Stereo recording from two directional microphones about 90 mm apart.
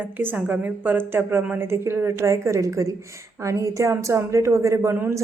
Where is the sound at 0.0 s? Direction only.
20° right (ahead or behind).